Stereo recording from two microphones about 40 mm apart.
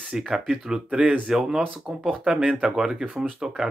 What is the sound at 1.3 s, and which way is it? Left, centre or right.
Speech, centre.